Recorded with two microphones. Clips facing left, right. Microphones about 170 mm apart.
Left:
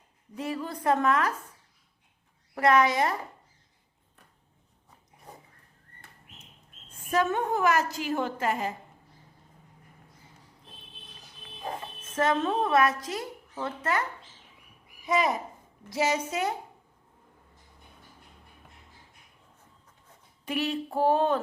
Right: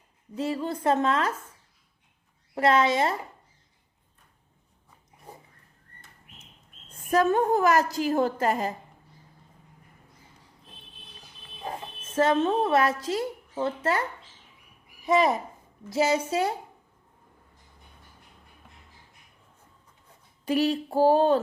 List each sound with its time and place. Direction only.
0.3 s a woman's voice: 30° right (ahead or behind)
2.6 s a woman's voice: 25° right (ahead or behind)
7.1 s a woman's voice: 40° right (ahead or behind)
12.1 s a woman's voice: 30° right (ahead or behind)
15.0 s a child's voice: 25° right (ahead or behind)
20.4 s a woman's voice: 35° right (ahead or behind)